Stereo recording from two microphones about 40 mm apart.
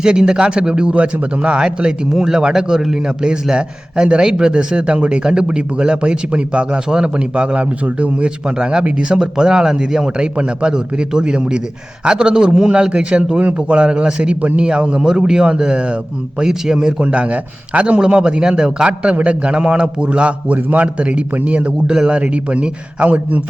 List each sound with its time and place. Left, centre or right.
0.0 s a man's voice: centre
3.5 s a man's voice: right
17.1 s a man's voice: right
21.8 s a man's voice: right